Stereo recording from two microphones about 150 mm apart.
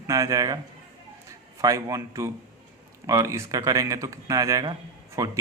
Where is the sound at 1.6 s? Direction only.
20° right (ahead or behind).